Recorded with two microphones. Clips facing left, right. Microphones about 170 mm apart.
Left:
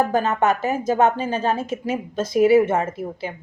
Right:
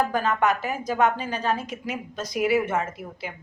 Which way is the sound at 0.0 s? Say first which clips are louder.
Left 4 dB; 25° left (ahead or behind).